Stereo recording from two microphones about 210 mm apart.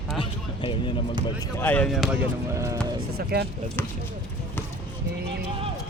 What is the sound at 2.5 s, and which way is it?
Speech, 15° right (ahead or behind).